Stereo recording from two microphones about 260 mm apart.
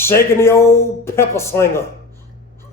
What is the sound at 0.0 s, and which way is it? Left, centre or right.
Speech, centre.